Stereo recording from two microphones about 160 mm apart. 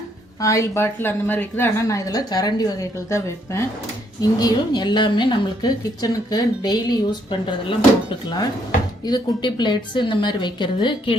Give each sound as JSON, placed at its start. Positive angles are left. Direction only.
{"t": 0.3, "sound": "a woman's voice", "side_deg": 20}
{"t": 9.0, "sound": "a woman's voice", "side_deg": 25}